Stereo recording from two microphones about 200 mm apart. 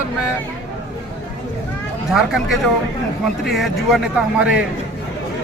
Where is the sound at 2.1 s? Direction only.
Centre (ahead or behind).